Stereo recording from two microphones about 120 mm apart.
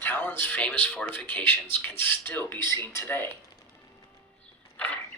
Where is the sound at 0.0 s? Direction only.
15° left (ahead or behind).